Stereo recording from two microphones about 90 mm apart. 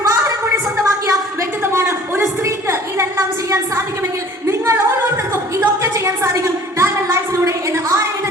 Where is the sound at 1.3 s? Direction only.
30° right (ahead or behind).